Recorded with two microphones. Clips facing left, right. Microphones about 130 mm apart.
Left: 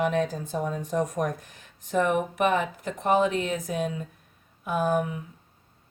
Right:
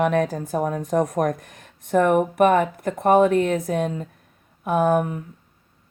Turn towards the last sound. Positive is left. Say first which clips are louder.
# right 6 dB
turn(degrees=-50)  # may be behind; listen again after turning